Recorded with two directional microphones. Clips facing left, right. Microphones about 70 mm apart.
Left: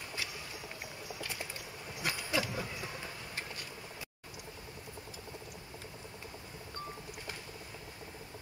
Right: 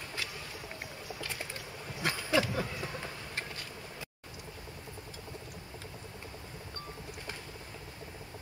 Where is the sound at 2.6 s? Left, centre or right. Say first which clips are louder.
Right 4 dB; right.